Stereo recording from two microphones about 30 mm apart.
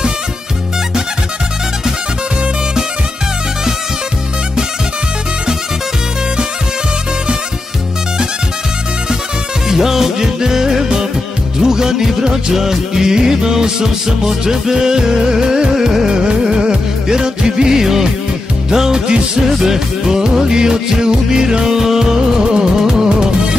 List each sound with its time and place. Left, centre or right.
9.7 s music: centre
16.3 s music: right
21.6 s music: centre